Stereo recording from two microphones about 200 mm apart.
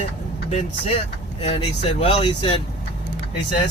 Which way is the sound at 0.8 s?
30° left (ahead or behind).